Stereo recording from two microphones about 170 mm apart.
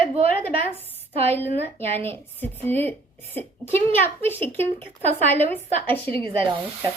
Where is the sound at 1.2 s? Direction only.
15° left (ahead or behind).